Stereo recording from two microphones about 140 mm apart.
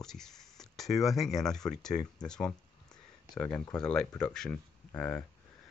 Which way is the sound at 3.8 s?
5° left (ahead or behind).